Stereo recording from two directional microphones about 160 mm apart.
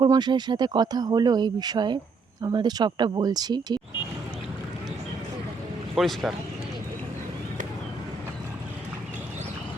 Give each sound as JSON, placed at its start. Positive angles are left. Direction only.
{"t": 0.0, "sound": "speech", "side_deg": -25}
{"t": 5.9, "sound": "speech", "side_deg": 0}